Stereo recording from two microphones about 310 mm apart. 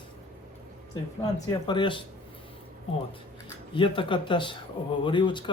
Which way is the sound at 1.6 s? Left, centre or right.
Centre.